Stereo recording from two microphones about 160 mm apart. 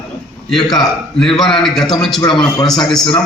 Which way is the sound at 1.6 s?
Centre (ahead or behind).